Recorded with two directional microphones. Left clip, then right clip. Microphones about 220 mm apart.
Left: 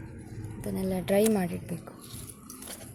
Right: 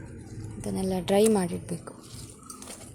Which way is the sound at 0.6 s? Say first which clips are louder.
Right 2 dB; 5° right (ahead or behind).